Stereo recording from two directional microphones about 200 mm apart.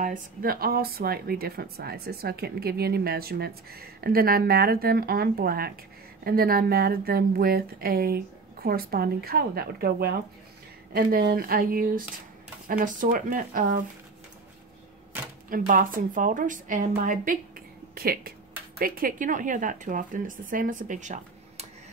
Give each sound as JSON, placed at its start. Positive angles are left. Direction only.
{"t": 0.0, "sound": "speech", "side_deg": -45}
{"t": 15.5, "sound": "speech", "side_deg": -45}